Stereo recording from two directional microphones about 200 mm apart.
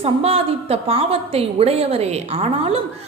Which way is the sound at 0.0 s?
30° right (ahead or behind).